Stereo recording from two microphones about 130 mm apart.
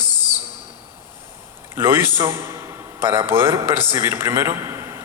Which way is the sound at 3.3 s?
20° right (ahead or behind).